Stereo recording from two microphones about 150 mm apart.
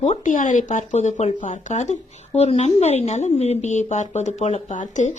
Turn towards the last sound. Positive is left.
turn(degrees=55)  # may be behind; listen again after turning